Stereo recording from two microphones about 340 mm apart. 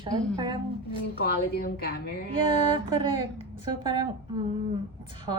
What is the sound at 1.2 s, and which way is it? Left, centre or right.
Speech, left.